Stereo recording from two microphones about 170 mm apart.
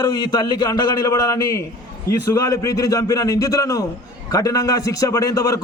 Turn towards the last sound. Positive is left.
turn(degrees=20)  # may be behind; listen again after turning